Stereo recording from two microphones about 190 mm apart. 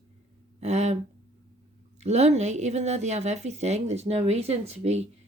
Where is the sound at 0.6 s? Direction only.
35° right (ahead or behind).